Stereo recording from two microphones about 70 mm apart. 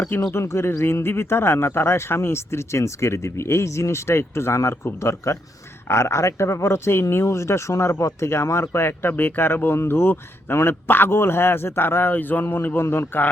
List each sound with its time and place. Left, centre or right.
0.3 s speech: left